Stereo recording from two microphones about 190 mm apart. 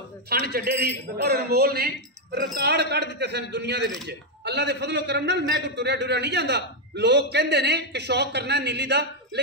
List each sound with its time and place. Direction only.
0.3 s a man's voice: 55° right (ahead or behind)